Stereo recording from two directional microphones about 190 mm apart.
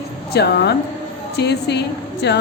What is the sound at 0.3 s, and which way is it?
A woman's voice, 60° left (ahead or behind).